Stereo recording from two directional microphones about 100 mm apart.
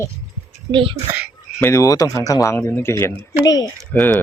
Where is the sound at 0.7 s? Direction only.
60° right (ahead or behind).